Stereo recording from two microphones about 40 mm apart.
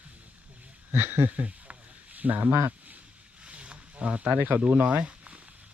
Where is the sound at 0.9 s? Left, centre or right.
Right.